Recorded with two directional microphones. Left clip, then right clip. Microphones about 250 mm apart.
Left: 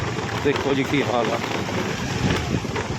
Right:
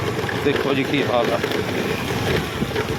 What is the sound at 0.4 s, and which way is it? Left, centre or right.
Speech, centre.